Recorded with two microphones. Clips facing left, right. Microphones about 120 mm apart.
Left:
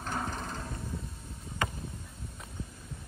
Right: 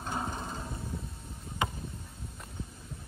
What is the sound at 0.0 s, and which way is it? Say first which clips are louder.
Mechanisms: even; 20° right (ahead or behind).